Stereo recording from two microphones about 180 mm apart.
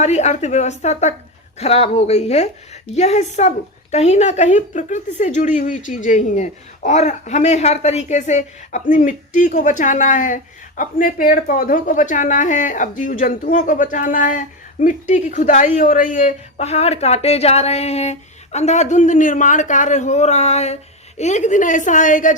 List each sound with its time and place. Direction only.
0.0 s a woman's voice: 40° left (ahead or behind)